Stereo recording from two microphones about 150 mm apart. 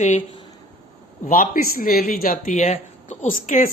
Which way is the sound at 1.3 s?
70° left (ahead or behind).